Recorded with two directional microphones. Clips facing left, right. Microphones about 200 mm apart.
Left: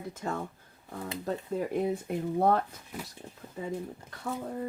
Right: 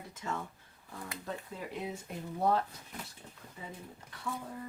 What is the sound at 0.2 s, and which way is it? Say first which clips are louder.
Speech: left 3 dB; 45° left (ahead or behind).